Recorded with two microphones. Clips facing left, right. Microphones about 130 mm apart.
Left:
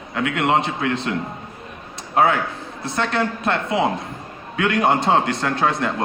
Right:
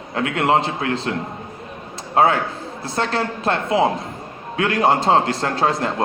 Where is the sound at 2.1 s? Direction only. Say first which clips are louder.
Right 1 dB; 30° right (ahead or behind).